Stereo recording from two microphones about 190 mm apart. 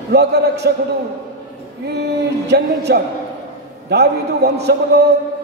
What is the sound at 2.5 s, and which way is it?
A man's voice, 60° right (ahead or behind).